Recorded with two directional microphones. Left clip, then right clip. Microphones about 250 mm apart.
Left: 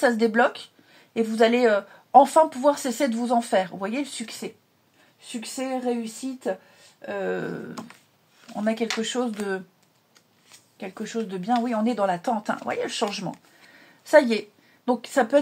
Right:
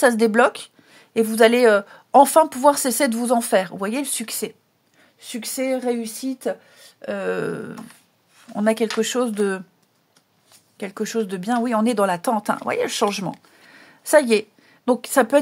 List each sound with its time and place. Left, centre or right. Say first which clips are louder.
0.0 s a woman's voice: right 4 dB; right
7.1 s a woman's voice: right 4 dB; right
10.8 s a woman's voice: right 6 dB; right
13.7 s a sound: right 3 dB; right
14.9 s a woman's voice: right 4 dB; right